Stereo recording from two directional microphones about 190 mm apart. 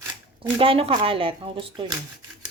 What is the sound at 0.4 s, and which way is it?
Speech, 30° right (ahead or behind).